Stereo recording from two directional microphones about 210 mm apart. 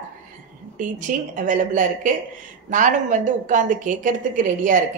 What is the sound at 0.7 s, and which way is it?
Speech, 35° right (ahead or behind).